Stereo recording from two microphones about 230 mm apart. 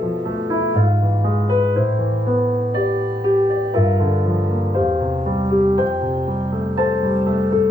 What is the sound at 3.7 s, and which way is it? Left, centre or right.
Music, centre.